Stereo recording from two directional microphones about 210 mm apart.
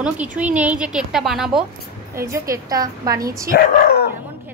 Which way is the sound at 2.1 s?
15° right (ahead or behind).